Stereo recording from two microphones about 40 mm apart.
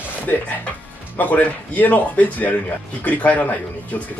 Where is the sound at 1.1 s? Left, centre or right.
Left.